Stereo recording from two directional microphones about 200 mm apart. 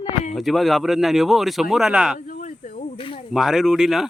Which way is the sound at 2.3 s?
40° left (ahead or behind).